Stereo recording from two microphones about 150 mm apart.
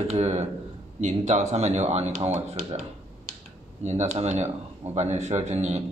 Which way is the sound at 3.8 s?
50° right (ahead or behind).